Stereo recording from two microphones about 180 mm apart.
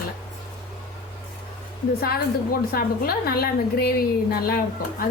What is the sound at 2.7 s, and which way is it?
A woman's voice, 55° left (ahead or behind).